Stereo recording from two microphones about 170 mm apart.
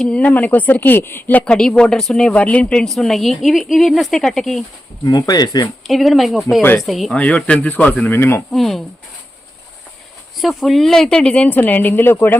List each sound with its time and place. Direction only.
0.0 s speech: 5° left (ahead or behind)
5.0 s speech: 20° left (ahead or behind)
5.9 s speech: centre (ahead or behind)
8.5 s speech: centre (ahead or behind)
10.4 s speech: centre (ahead or behind)